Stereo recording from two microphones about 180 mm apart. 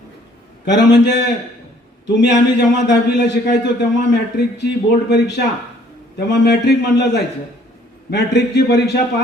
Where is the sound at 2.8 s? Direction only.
75° left (ahead or behind).